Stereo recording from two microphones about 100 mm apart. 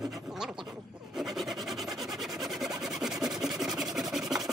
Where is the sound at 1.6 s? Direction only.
5° right (ahead or behind).